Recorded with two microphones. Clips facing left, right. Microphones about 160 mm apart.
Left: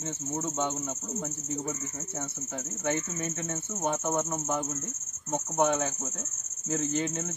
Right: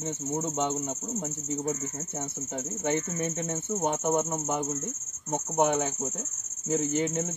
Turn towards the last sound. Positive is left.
turn(degrees=-15)  # may be behind; listen again after turning